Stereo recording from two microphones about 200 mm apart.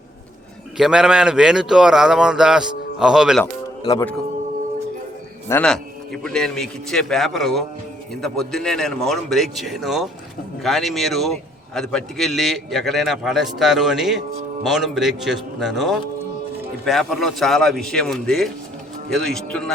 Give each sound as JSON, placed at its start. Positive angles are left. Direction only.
{"t": 0.8, "sound": "a man's voice", "side_deg": -5}
{"t": 3.4, "sound": "music", "side_deg": 20}
{"t": 5.5, "sound": "a man's voice", "side_deg": 5}